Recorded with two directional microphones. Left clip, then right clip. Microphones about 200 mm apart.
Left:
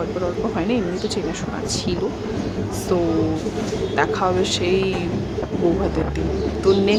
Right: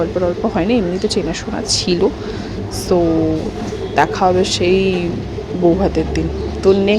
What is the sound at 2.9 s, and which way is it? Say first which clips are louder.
A woman's voice: right 6 dB; 20° right (ahead or behind).